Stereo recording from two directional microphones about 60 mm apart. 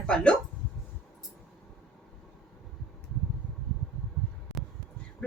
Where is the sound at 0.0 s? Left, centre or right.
Centre.